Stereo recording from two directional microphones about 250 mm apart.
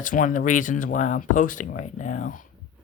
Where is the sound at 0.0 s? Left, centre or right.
Left.